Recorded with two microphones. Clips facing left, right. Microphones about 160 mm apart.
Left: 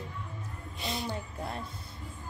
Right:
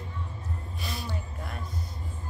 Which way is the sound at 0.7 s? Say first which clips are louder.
Left 4 dB; 20° left (ahead or behind).